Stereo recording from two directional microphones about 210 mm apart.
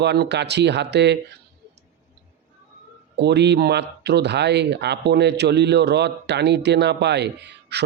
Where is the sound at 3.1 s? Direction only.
55° right (ahead or behind).